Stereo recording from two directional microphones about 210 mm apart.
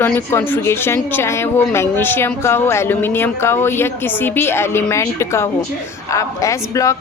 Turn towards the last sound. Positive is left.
turn(degrees=15)  # may be behind; listen again after turning